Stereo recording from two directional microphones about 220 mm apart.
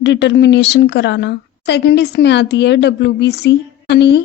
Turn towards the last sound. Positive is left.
turn(degrees=50)  # may be behind; listen again after turning